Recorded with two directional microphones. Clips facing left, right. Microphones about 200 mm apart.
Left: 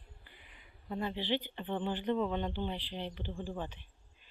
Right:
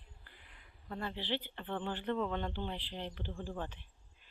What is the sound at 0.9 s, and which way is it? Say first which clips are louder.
Speech: left 4 dB; 20° left (ahead or behind).